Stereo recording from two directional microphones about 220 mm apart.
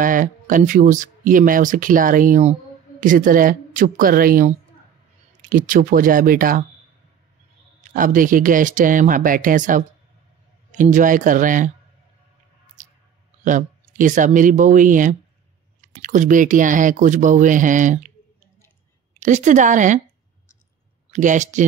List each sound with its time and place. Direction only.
0.0 s speech: 35° right (ahead or behind)
5.5 s speech: 40° right (ahead or behind)
7.9 s speech: 40° right (ahead or behind)
12.8 s squish: 35° right (ahead or behind)
13.4 s speech: 35° right (ahead or behind)
19.1 s speech: 35° right (ahead or behind)
21.1 s speech: 35° right (ahead or behind)